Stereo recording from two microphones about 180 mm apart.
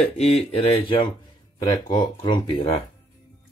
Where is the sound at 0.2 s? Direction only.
35° left (ahead or behind).